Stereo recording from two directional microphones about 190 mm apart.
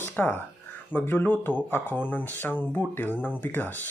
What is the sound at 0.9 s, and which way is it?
Speech, 10° left (ahead or behind).